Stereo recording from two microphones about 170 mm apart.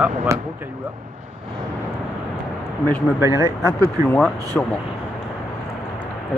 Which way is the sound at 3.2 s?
15° right (ahead or behind).